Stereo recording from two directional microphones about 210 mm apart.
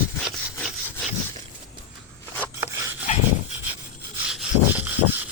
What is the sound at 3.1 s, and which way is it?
Dog, 35° left (ahead or behind).